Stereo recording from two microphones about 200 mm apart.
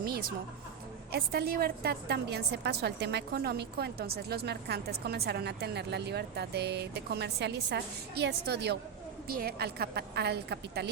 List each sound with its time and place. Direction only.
1.1 s a woman's voice: 50° right (ahead or behind)